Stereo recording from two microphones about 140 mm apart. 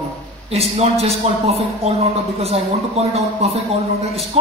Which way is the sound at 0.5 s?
45° right (ahead or behind).